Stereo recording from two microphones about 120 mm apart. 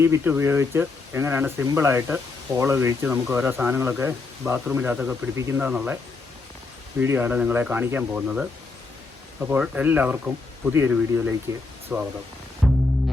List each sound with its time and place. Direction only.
0.0 s speech: 20° right (ahead or behind)
7.0 s speech: 20° right (ahead or behind)
12.6 s music: centre (ahead or behind)